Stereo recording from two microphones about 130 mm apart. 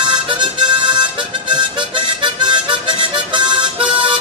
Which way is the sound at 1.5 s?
40° right (ahead or behind).